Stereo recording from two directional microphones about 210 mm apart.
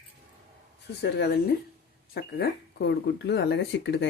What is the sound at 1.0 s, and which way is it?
Speech, 50° left (ahead or behind).